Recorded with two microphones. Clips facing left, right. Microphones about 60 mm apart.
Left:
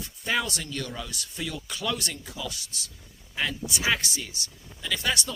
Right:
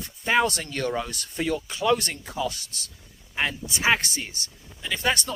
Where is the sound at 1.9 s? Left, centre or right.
Right.